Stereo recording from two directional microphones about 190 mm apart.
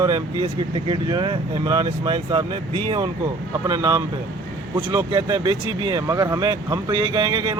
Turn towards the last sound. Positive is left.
turn(degrees=-20)  # may be behind; listen again after turning